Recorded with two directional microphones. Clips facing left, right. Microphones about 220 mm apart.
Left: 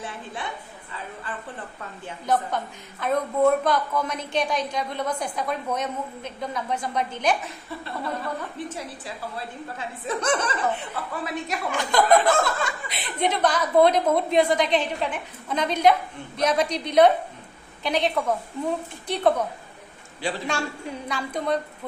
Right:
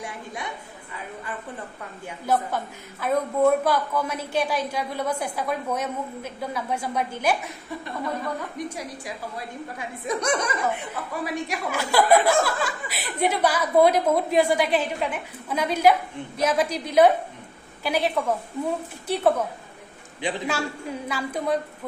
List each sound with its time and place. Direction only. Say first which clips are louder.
0.0 s a woman's voice: even; 15° right (ahead or behind)
2.0 s speech: even; 5° right (ahead or behind)
8.5 s speech: right 1 dB; 15° right (ahead or behind)
20.2 s a man's voice: right 1 dB; 20° right (ahead or behind)
21.1 s speech: even; 5° right (ahead or behind)